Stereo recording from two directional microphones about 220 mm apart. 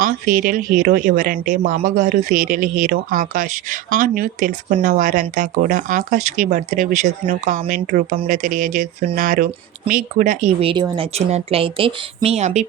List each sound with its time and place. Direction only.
0.0 s speech: 40° right (ahead or behind)